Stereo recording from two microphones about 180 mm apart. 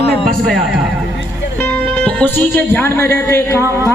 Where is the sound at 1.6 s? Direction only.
10° left (ahead or behind).